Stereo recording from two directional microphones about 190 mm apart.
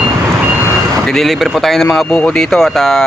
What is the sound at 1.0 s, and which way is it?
Speech, centre (ahead or behind).